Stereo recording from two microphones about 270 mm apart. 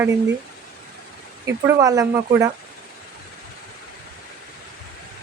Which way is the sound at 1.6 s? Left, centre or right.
Centre.